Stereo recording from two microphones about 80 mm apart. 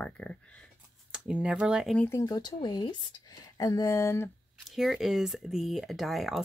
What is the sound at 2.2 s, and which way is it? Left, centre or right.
Speech, left.